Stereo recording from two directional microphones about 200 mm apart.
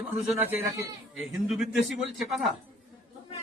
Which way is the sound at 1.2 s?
Centre (ahead or behind).